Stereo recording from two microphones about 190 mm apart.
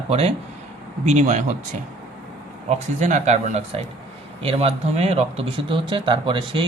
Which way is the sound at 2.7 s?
40° right (ahead or behind).